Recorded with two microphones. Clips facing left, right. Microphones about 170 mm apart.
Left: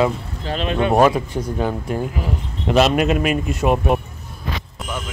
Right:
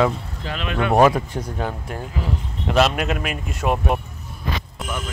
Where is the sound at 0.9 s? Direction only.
5° left (ahead or behind).